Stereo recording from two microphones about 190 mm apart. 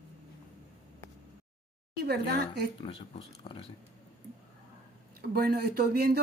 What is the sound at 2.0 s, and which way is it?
Speech, 60° right (ahead or behind).